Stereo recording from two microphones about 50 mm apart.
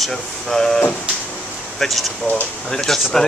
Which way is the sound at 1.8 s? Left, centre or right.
Centre.